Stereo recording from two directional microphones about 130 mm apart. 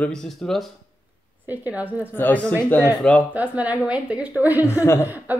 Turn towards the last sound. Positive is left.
turn(degrees=20)  # may be behind; listen again after turning